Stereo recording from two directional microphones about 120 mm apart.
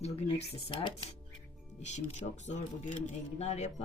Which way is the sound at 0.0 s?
60° left (ahead or behind).